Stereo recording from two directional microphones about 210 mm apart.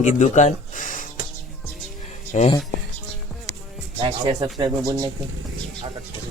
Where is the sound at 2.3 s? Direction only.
35° left (ahead or behind).